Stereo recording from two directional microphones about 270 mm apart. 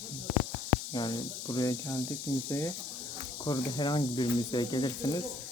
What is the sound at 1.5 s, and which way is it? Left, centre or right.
Speech, centre.